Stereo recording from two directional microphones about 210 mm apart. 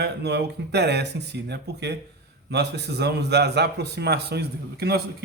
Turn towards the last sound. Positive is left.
turn(degrees=-50)  # may be behind; listen again after turning